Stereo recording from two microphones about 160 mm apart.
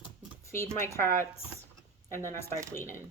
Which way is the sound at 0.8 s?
15° left (ahead or behind).